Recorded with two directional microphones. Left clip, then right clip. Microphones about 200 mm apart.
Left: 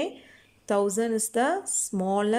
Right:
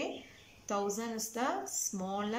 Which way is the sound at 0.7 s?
45° left (ahead or behind).